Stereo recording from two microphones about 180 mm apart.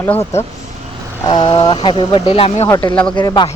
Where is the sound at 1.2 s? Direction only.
25° left (ahead or behind).